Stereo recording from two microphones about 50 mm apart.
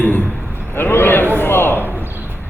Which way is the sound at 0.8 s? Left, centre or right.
Left.